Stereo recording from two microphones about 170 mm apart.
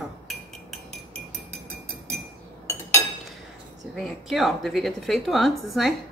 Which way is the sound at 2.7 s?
15° left (ahead or behind).